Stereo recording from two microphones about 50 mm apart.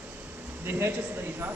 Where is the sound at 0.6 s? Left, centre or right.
Right.